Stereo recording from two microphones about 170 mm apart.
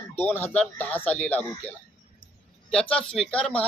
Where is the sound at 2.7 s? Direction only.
5° left (ahead or behind).